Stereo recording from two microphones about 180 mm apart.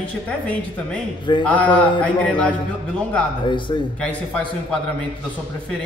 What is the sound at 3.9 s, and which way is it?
Speech, 5° left (ahead or behind).